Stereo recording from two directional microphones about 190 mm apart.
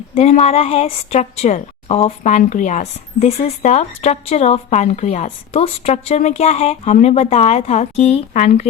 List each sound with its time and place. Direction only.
0.1 s a woman's voice: 35° left (ahead or behind)